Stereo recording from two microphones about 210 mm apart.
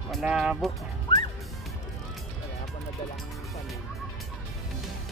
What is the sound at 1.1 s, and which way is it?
Music, 20° left (ahead or behind).